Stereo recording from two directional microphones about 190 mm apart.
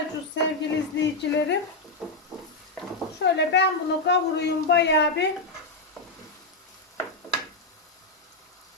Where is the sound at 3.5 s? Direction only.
70° left (ahead or behind).